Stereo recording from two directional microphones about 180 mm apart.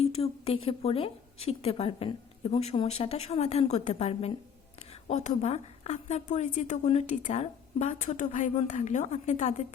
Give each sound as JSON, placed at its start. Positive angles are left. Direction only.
{"t": 0.0, "sound": "a woman's voice", "side_deg": 35}